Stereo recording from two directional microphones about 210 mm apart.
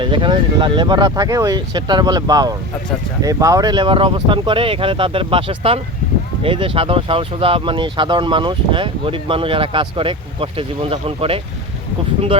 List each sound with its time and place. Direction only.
0.0 s speech: 25° right (ahead or behind)